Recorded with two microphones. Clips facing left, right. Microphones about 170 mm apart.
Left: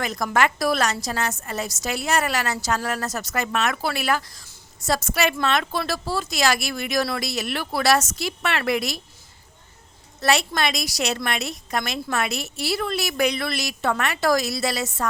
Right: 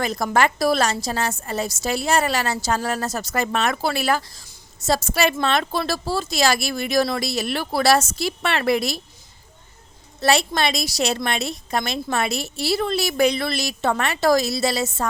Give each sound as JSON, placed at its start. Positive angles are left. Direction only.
{"t": 0.0, "sound": "a woman's voice", "side_deg": -30}
{"t": 10.2, "sound": "a woman's voice", "side_deg": -30}